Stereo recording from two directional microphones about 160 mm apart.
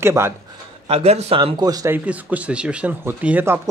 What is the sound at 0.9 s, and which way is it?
Speech, 40° right (ahead or behind).